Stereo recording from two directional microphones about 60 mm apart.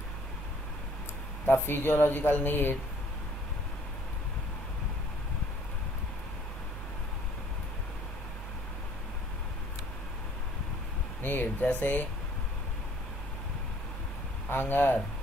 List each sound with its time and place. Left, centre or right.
1.4 s speech: left
11.2 s speech: left
14.5 s speech: left